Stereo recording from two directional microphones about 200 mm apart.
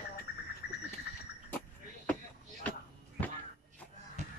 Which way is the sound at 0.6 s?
55° left (ahead or behind).